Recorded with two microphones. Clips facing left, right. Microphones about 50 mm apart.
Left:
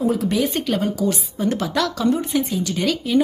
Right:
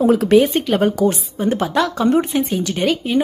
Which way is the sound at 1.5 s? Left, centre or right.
Right.